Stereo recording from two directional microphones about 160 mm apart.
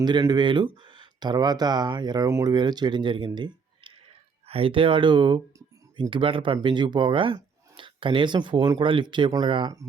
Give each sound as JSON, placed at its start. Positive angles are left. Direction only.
{"t": 0.0, "sound": "speech", "side_deg": -25}